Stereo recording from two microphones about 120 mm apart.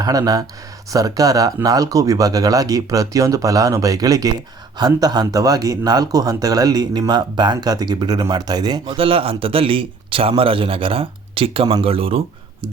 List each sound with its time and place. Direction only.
0.0 s speech: 30° right (ahead or behind)
9.0 s a man's voice: 50° right (ahead or behind)